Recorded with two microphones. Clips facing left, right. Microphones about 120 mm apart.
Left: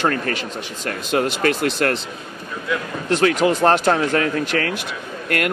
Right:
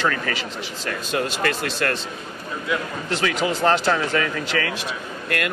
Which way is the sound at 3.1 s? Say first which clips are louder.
Left 7 dB; 55° left (ahead or behind).